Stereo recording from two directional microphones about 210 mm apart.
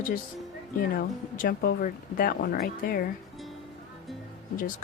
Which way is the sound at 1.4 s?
40° left (ahead or behind).